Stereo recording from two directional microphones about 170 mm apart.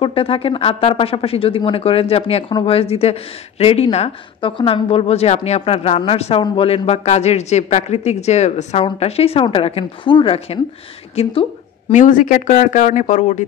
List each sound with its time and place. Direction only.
0.0 s speech: 35° left (ahead or behind)
11.9 s speech: 50° left (ahead or behind)